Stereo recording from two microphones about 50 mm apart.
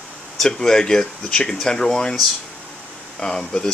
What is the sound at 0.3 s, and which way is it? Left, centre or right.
Speech, centre.